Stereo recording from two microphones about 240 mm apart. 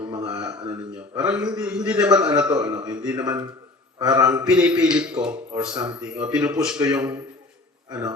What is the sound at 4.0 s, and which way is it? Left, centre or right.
Speech, centre.